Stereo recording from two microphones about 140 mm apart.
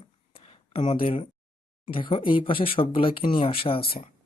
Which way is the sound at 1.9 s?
40° left (ahead or behind).